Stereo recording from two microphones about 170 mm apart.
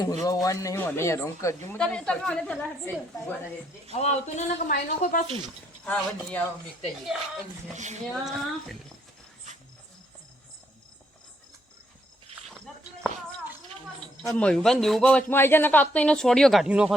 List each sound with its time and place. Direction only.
0.0 s a man's voice: 20° left (ahead or behind)
1.8 s speech: 5° left (ahead or behind)
3.9 s a man's voice: 40° left (ahead or behind)
5.8 s a woman's voice: 10° left (ahead or behind)
8.0 s speech: centre (ahead or behind)
12.5 s a sound: centre (ahead or behind)
14.3 s speech: 5° left (ahead or behind)